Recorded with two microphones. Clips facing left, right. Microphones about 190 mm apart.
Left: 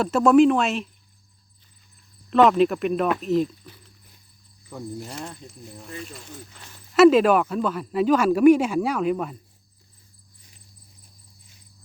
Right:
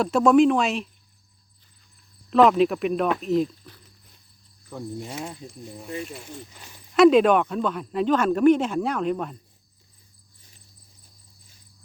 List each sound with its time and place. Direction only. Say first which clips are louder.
0.0 s speech: left 1 dB; centre (ahead or behind)
2.3 s speech: even; centre (ahead or behind)
6.5 s walk: even; 10° right (ahead or behind)
6.9 s speech: left 1 dB; 5° left (ahead or behind)